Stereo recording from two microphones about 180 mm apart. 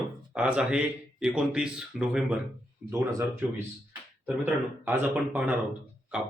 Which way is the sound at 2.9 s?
15° right (ahead or behind).